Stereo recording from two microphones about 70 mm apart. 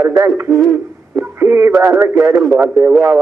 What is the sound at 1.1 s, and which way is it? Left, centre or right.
Radio, right.